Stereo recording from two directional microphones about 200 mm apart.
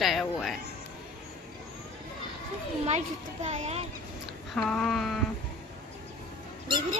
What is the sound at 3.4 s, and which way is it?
Speech, 30° right (ahead or behind).